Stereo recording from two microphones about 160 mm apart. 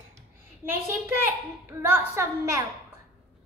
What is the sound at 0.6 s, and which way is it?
A woman's voice, 15° right (ahead or behind).